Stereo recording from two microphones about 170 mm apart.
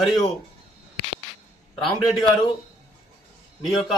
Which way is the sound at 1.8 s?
Centre (ahead or behind).